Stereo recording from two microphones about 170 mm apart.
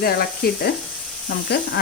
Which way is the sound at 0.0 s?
65° left (ahead or behind).